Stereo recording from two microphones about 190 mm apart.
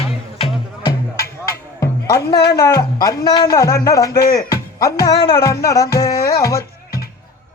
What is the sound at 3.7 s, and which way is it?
Speech, 50° left (ahead or behind).